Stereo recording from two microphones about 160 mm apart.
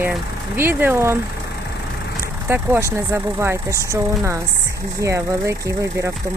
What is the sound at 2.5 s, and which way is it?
Speech, 15° right (ahead or behind).